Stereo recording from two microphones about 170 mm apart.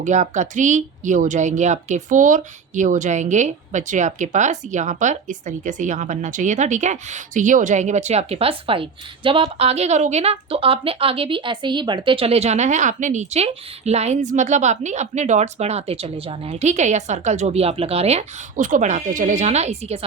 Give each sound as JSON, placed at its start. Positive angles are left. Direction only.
{"t": 0.0, "sound": "speech", "side_deg": -45}